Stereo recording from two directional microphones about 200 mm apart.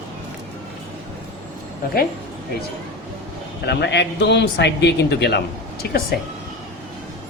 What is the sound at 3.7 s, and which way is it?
A man's voice, 60° left (ahead or behind).